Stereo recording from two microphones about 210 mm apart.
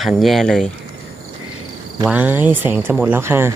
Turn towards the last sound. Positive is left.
turn(degrees=-10)  # may be behind; listen again after turning